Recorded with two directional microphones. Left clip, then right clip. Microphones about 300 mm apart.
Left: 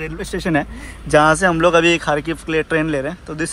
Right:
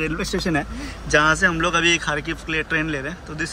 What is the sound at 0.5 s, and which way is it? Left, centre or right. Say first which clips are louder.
Speech: left 4 dB; left.